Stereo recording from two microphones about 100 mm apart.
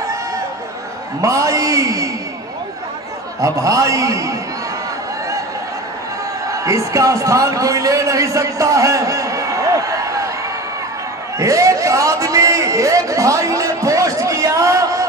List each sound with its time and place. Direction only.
1.2 s a man's voice: 35° right (ahead or behind)
3.3 s a man's voice: 35° right (ahead or behind)
6.5 s a man's voice: 30° right (ahead or behind)
11.3 s a man's voice: 30° right (ahead or behind)